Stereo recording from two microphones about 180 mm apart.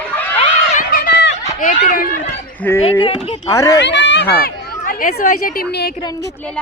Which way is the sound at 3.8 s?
80° left.